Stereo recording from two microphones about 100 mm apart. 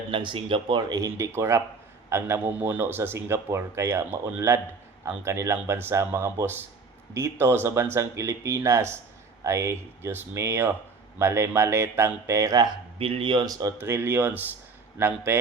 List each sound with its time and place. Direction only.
0.1 s speech: 55° right (ahead or behind); by 12.5 s 30° right (ahead or behind)
13.0 s speech: 65° right (ahead or behind); by 13.7 s 40° right (ahead or behind)
13.8 s speech: 25° right (ahead or behind)